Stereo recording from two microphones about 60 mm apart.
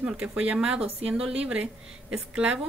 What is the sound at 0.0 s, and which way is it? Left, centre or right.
A woman's voice, centre.